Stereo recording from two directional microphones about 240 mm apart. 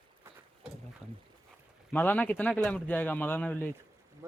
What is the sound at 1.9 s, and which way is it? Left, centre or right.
Speech, centre.